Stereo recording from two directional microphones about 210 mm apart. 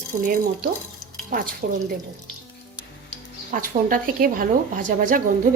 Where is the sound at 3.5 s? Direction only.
40° right (ahead or behind).